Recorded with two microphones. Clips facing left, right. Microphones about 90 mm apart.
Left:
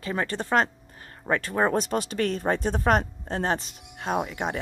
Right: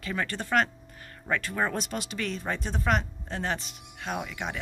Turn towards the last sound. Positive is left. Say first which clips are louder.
# left 6 dB
turn(degrees=40)  # may be behind; listen again after turning